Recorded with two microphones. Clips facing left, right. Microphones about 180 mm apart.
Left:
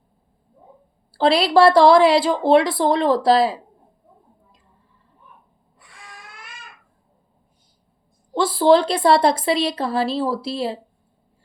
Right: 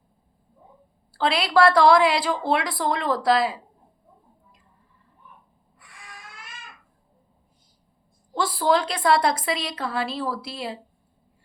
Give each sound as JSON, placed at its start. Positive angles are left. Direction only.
{"t": 1.1, "sound": "speech", "side_deg": 30}
{"t": 8.3, "sound": "speech", "side_deg": 25}